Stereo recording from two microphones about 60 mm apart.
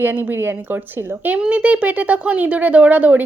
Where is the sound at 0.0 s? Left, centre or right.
Right.